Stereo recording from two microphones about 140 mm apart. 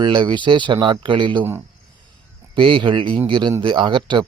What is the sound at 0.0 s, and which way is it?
Speech, 35° right (ahead or behind).